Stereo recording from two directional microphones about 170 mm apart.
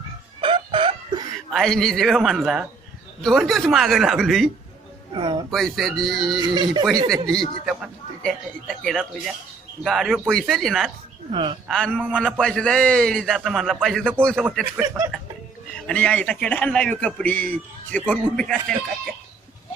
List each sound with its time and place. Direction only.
0.4 s chicken: 30° right (ahead or behind)
1.5 s a man's voice: centre (ahead or behind)
5.1 s speech: 25° right (ahead or behind)
5.5 s a man's voice: centre (ahead or behind)
6.5 s speech: 25° right (ahead or behind)
7.1 s a man's voice: centre (ahead or behind)
11.3 s speech: 30° right (ahead or behind)
11.7 s a man's voice: 5° left (ahead or behind)
14.8 s speech: 15° right (ahead or behind)
15.7 s a man's voice: 5° left (ahead or behind)